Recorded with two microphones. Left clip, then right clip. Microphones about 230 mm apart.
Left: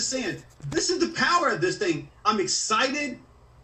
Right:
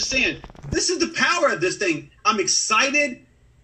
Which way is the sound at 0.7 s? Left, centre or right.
Right.